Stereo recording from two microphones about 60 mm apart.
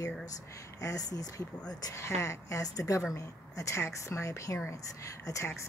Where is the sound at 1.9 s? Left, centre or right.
Left.